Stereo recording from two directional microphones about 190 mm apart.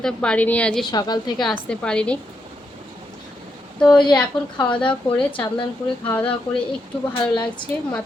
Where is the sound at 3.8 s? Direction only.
5° left (ahead or behind).